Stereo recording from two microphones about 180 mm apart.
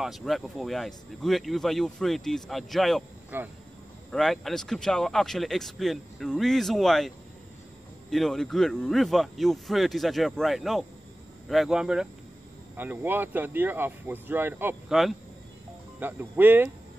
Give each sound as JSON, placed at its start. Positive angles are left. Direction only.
{"t": 0.0, "sound": "speech", "side_deg": 0}
{"t": 3.3, "sound": "speech", "side_deg": -10}
{"t": 4.1, "sound": "speech", "side_deg": 0}
{"t": 8.1, "sound": "speech", "side_deg": 0}
{"t": 16.0, "sound": "speech", "side_deg": -10}